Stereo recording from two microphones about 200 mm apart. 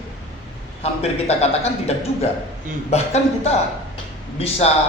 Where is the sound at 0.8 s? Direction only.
30° left (ahead or behind).